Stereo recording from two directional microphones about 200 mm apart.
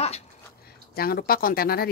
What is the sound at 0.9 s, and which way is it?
Speech, 50° left (ahead or behind).